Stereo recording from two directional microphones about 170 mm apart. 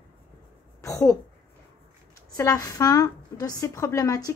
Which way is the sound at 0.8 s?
20° left (ahead or behind).